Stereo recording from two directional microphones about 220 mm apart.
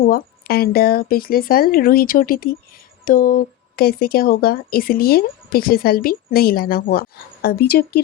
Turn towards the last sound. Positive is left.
turn(degrees=45)  # may be behind; listen again after turning